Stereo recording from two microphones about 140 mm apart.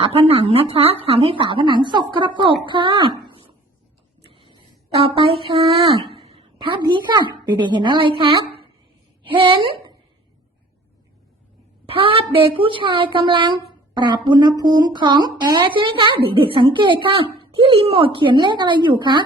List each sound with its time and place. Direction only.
0.0 s a woman's voice: 45° right (ahead or behind)
4.3 s a sound: 40° right (ahead or behind)
5.0 s a woman's voice: 40° right (ahead or behind)
11.9 s a woman's voice: 40° right (ahead or behind)